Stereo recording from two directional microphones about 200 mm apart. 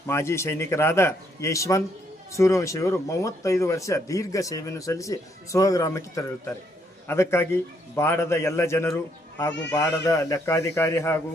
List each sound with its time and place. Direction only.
0.1 s speech: 15° left (ahead or behind)